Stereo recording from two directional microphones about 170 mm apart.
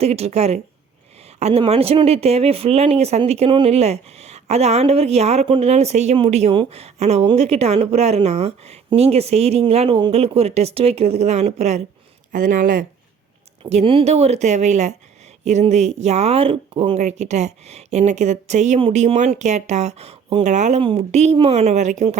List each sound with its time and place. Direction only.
0.0 s speech: 40° right (ahead or behind)
12.3 s speech: 50° right (ahead or behind)
13.7 s speech: 35° right (ahead or behind)